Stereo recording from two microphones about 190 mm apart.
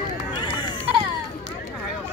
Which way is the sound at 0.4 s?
25° left (ahead or behind).